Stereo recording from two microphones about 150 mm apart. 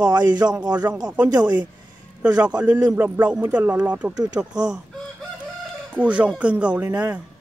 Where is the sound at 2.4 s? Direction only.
10° right (ahead or behind).